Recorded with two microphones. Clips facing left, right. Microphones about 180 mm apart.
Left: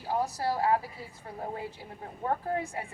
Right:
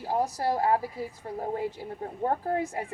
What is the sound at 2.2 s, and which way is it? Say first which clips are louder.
Speech: right 3 dB; 35° right (ahead or behind).